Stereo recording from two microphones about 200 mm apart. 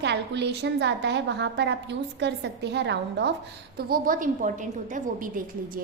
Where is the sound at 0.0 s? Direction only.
60° right (ahead or behind).